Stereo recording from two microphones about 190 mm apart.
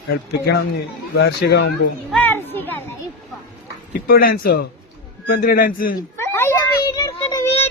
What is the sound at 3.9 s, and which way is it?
A man's voice, 50° left (ahead or behind).